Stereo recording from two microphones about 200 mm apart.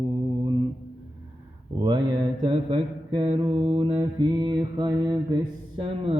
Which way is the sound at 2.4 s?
25° right (ahead or behind).